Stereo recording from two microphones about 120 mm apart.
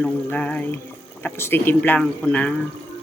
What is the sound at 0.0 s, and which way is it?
Speech, 10° left (ahead or behind).